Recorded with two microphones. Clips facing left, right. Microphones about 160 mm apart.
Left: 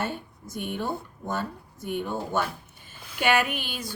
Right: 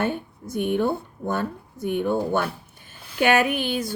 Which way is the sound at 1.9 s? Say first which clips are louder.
Right 6 dB; 55° right (ahead or behind).